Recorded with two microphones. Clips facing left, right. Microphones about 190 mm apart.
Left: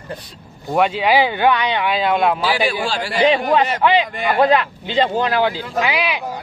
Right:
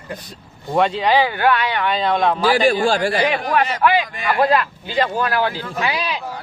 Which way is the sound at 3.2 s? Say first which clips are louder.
Left 3 dB; 25° left (ahead or behind).